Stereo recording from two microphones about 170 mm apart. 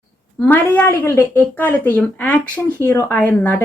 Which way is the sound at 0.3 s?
10° left (ahead or behind).